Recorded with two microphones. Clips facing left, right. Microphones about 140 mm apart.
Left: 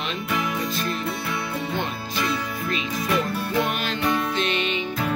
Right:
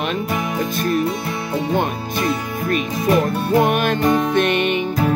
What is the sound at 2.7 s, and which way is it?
Music, 45° right (ahead or behind).